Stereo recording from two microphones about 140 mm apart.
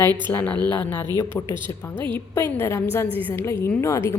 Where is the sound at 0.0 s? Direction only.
15° left (ahead or behind).